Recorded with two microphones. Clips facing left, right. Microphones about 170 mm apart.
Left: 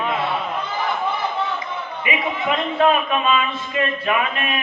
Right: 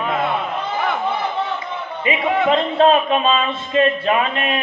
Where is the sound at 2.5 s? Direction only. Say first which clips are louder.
Right 2 dB; 30° right (ahead or behind).